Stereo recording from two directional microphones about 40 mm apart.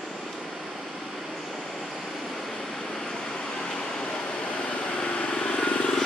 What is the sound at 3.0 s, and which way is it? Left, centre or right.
Vehicle, centre.